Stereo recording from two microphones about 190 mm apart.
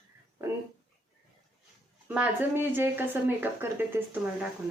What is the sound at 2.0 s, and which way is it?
Speech, 10° right (ahead or behind).